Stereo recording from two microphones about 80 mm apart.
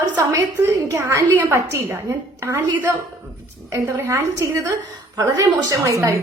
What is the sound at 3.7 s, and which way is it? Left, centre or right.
A woman's voice, right.